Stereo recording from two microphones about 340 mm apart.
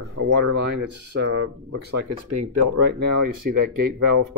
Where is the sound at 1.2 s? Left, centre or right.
Right.